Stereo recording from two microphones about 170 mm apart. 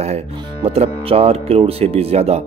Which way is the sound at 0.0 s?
40° right (ahead or behind).